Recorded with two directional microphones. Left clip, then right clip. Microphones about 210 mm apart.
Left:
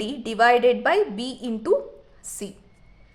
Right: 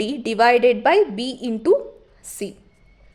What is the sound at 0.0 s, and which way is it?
A woman's voice, 25° right (ahead or behind).